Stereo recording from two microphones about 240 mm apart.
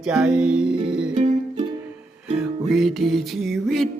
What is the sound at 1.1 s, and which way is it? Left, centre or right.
Music, right.